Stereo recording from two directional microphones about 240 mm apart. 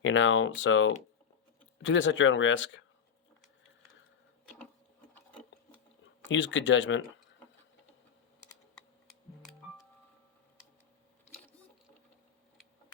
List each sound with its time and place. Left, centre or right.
0.0 s speech: left
6.2 s speech: left